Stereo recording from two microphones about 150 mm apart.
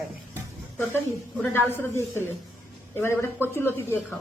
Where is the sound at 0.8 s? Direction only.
15° left (ahead or behind).